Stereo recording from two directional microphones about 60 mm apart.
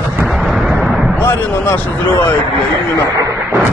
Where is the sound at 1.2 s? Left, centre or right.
Left.